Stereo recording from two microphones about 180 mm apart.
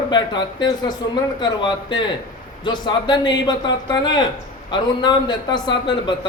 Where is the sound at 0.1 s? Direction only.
25° left (ahead or behind).